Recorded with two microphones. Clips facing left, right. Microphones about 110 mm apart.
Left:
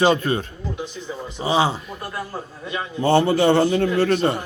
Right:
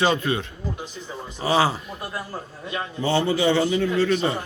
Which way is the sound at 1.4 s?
25° left (ahead or behind).